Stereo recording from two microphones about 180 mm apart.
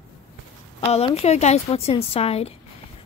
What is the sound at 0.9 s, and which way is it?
A woman's voice, 35° left (ahead or behind).